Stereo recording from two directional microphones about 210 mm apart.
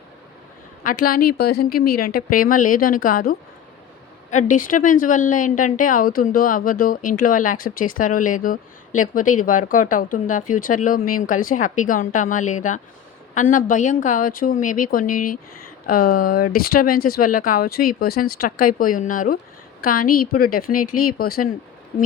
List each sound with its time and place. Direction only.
1.0 s a woman's voice: 45° left (ahead or behind)